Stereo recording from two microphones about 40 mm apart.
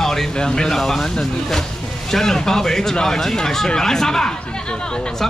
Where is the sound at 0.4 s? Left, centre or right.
Centre.